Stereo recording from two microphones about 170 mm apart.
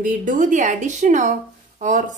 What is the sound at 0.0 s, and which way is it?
A woman's voice, 50° right (ahead or behind).